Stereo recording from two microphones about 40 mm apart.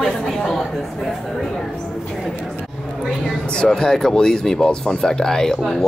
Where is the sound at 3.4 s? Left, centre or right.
Left.